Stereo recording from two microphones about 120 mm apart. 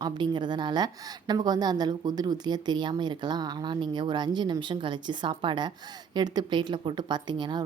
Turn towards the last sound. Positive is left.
turn(degrees=-40)  # may be behind; listen again after turning